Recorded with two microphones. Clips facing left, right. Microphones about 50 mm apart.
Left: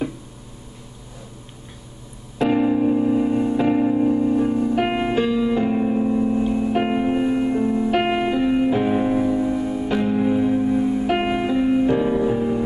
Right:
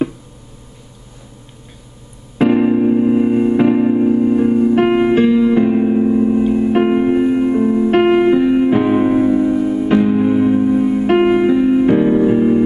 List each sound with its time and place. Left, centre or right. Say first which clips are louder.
2.5 s music: right 4 dB; right
8.6 s music: right 6 dB; right
11.1 s music: right 9 dB; centre